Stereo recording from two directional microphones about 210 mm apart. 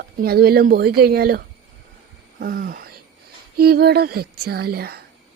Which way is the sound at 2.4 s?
45° right (ahead or behind).